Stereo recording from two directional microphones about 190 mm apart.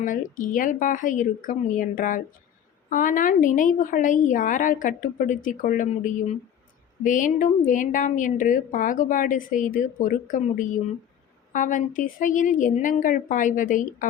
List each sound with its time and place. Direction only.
0.0 s a woman's voice: 45° left (ahead or behind)